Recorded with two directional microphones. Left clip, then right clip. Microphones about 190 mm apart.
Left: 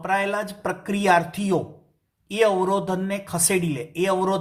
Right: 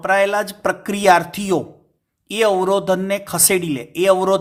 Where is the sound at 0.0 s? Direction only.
40° right (ahead or behind).